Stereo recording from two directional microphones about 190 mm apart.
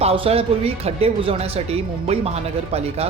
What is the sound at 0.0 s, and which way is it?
A man's voice, 30° right (ahead or behind).